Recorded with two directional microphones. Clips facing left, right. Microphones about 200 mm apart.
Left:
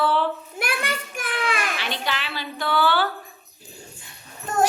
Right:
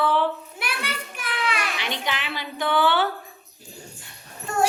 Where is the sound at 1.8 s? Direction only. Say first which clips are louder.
Even; 15° right (ahead or behind).